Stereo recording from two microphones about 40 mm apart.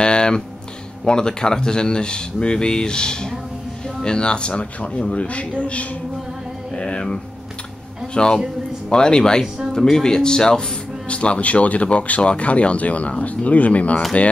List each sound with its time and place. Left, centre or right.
0.0 s a sound: left
1.0 s speech: left
6.7 s music: left
8.1 s speech: left
11.1 s speech: left